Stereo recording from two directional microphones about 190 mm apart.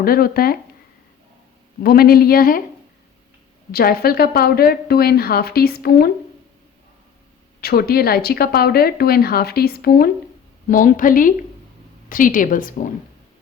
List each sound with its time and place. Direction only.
0.0 s speech: 50° left (ahead or behind)
1.8 s speech: 55° left (ahead or behind)
3.7 s speech: 50° left (ahead or behind)
7.6 s speech: 55° left (ahead or behind)